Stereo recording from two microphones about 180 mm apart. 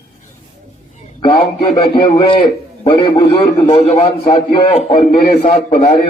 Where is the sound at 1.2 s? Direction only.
30° left (ahead or behind).